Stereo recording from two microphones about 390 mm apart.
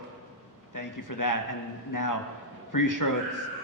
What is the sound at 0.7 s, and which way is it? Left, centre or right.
A woman's voice, left.